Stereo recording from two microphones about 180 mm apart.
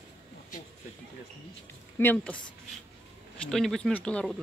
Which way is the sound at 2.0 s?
10° left (ahead or behind).